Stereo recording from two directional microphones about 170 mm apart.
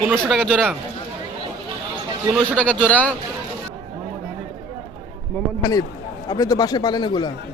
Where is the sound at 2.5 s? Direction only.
10° left (ahead or behind).